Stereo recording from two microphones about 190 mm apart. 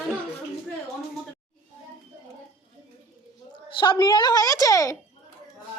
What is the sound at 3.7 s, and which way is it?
Speech, 25° left (ahead or behind).